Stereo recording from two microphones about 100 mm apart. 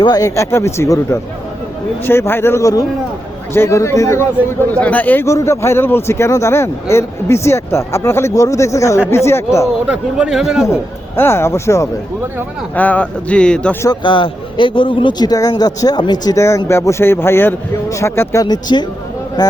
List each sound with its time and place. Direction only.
0.0 s a man's voice: 40° left (ahead or behind)
4.7 s speech: 15° left (ahead or behind)
5.2 s a man's voice: 30° left (ahead or behind)
9.8 s speech: 10° right (ahead or behind)
11.2 s a man's voice: 25° left (ahead or behind)
12.7 s speech: 15° left (ahead or behind)
14.0 s a man's voice: 55° left (ahead or behind)
15.3 s speech: 40° left (ahead or behind)
16.4 s a man's voice: 30° left (ahead or behind)
18.4 s speech: 45° left (ahead or behind)